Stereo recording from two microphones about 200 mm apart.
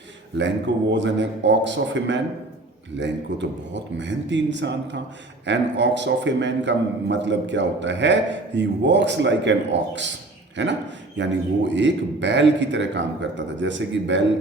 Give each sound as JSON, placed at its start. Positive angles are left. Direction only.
{"t": 0.3, "sound": "a man's voice", "side_deg": -65}